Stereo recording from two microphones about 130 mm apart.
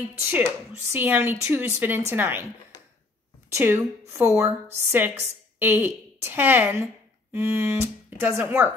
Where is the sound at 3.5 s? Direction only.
20° right (ahead or behind).